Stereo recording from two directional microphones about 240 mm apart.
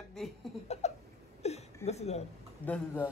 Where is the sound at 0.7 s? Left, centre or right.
Left.